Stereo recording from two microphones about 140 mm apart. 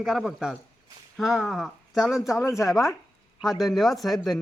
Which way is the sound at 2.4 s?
20° left (ahead or behind).